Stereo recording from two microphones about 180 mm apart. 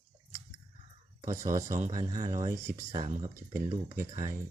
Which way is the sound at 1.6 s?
45° right (ahead or behind).